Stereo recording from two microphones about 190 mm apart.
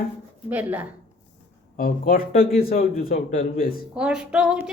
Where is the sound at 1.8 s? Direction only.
50° left (ahead or behind).